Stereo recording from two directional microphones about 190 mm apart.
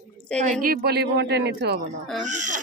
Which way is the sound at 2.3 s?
40° right (ahead or behind).